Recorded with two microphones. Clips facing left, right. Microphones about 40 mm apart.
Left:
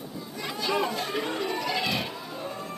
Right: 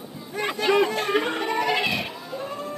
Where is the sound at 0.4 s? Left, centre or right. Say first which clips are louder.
Right 7 dB; right.